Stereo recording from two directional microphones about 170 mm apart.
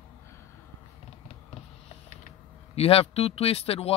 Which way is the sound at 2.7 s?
35° left (ahead or behind).